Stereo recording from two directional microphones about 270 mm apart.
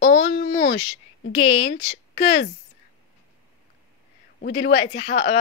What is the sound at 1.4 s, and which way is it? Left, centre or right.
Speech, left.